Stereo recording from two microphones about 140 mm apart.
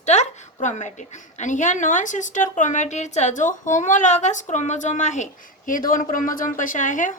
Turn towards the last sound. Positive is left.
turn(degrees=65)  # may be behind; listen again after turning